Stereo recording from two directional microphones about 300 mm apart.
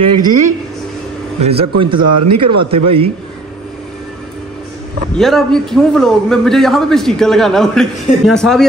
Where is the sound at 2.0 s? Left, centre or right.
Right.